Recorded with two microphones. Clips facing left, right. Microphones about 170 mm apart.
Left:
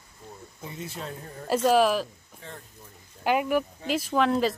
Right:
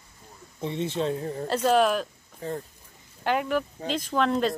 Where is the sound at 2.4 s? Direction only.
40° right (ahead or behind).